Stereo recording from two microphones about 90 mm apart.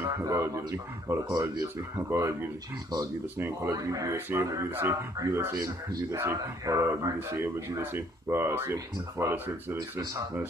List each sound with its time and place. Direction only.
0.0 s speech: 35° right (ahead or behind)
4.6 s speech: 25° right (ahead or behind)
5.1 s speech: 35° right (ahead or behind)
9.8 s speech: 40° right (ahead or behind)